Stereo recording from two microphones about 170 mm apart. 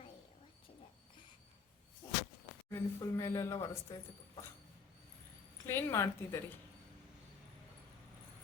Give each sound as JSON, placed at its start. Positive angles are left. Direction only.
{"t": 2.0, "sound": "a sound", "side_deg": 20}
{"t": 2.6, "sound": "a woman's voice", "side_deg": 15}
{"t": 5.6, "sound": "a woman's voice", "side_deg": 15}